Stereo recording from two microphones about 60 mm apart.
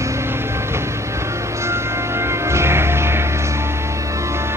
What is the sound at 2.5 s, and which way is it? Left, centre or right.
Music, right.